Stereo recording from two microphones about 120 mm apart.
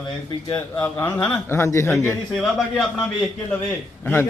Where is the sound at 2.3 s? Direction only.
Centre (ahead or behind).